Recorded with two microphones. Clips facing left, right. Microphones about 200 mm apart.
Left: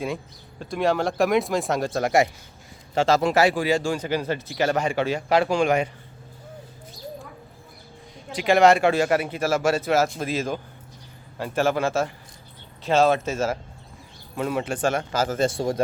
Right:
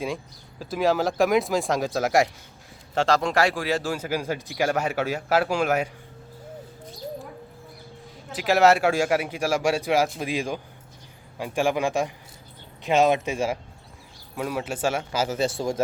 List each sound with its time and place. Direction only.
0.6 s a man's voice: centre (ahead or behind)
8.3 s a man's voice: 5° right (ahead or behind)